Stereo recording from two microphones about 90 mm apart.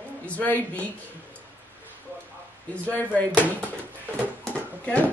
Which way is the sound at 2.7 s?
15° left (ahead or behind).